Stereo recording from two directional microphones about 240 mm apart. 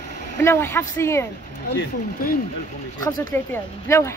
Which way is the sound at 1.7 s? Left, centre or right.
Left.